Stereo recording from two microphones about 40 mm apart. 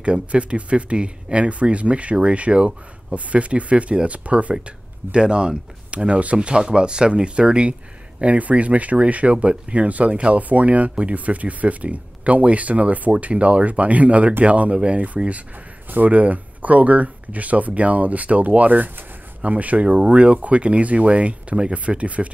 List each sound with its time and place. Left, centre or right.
0.0 s speech: right
4.6 s speech: right